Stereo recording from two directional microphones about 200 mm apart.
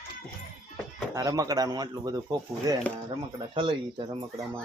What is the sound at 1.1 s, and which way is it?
Speech, 15° right (ahead or behind).